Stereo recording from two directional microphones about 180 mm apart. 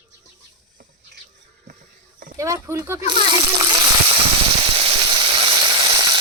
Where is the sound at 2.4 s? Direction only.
15° right (ahead or behind).